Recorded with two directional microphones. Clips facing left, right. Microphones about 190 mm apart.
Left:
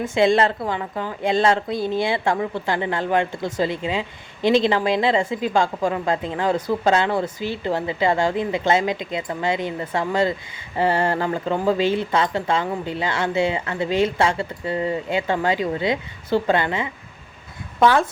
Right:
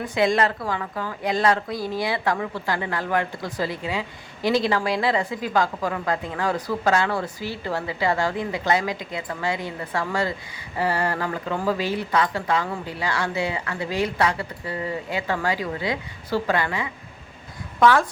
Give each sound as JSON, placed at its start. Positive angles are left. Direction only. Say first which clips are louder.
{"t": 0.0, "sound": "speech", "louder": "left 4 dB", "side_deg": 25}